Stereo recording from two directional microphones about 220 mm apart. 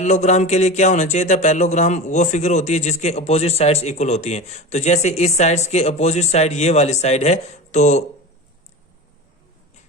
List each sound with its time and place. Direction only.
0.0 s speech: 30° left (ahead or behind)